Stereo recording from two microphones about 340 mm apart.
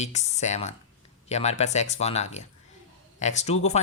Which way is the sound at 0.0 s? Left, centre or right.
Centre.